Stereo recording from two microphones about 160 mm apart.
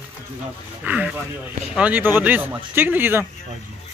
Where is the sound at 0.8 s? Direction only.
10° right (ahead or behind).